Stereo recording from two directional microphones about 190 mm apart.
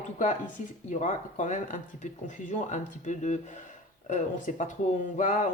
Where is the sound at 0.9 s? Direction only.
40° left (ahead or behind).